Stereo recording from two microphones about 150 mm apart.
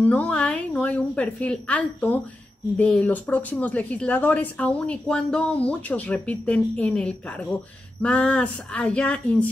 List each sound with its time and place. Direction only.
0.0 s speech: 10° left (ahead or behind)